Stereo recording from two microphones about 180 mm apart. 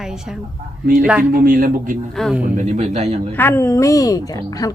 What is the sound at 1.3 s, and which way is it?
Speech, 50° right (ahead or behind).